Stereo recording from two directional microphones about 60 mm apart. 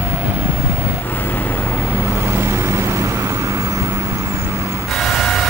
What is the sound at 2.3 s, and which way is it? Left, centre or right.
Vehicle, right.